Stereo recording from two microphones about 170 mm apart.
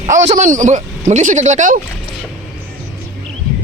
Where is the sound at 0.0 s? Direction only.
50° right (ahead or behind).